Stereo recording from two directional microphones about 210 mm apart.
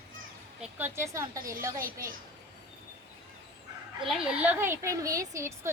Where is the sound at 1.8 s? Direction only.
40° right (ahead or behind).